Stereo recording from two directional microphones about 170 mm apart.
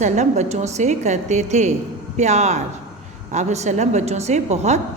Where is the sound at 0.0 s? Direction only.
40° right (ahead or behind).